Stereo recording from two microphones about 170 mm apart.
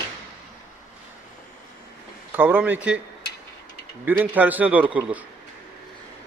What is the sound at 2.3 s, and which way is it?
Speech, 10° right (ahead or behind).